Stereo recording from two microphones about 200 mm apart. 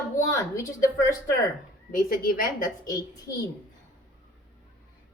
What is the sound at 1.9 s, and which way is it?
Speech, 45° left (ahead or behind).